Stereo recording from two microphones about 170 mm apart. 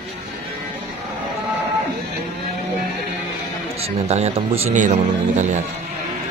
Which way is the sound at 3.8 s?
40° right (ahead or behind).